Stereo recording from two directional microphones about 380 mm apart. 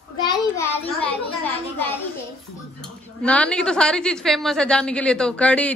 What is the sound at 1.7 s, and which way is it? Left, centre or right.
A woman's voice, centre.